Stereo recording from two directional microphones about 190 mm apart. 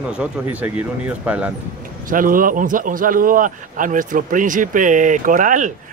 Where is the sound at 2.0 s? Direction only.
45° right (ahead or behind).